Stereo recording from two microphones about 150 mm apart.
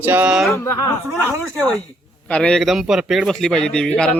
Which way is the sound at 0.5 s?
20° left (ahead or behind).